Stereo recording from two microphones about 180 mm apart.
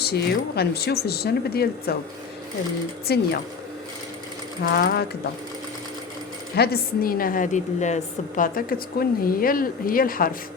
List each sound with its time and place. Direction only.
0.0 s speech: 60° left (ahead or behind)
3.1 s speech: 60° left (ahead or behind)
4.6 s speech: 55° left (ahead or behind)
6.6 s a woman's voice: 60° left (ahead or behind)